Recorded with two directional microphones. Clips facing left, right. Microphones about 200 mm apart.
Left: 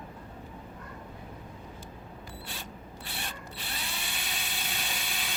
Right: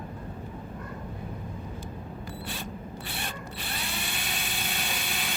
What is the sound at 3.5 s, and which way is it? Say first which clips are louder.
Drill: right 4 dB; 60° right (ahead or behind).